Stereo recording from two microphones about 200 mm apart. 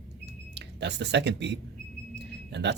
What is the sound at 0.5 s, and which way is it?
Speech, 60° right (ahead or behind).